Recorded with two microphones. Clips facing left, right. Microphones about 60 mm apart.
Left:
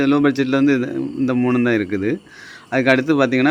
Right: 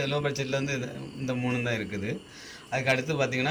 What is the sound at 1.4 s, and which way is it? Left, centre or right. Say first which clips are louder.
Speech: left 13 dB; left.